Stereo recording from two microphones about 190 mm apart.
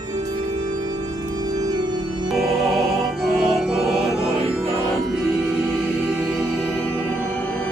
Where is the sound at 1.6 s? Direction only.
20° right (ahead or behind).